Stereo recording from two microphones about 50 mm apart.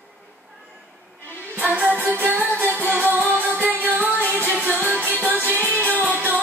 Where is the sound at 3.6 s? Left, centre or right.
Right.